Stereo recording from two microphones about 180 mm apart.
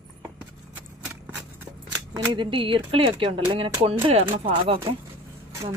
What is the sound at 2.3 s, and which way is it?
A woman's voice, 25° right (ahead or behind).